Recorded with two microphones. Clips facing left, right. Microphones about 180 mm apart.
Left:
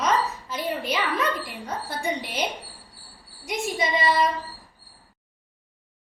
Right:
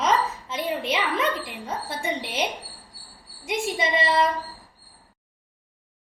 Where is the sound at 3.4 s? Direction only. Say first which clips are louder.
Right 1 dB; 25° right (ahead or behind).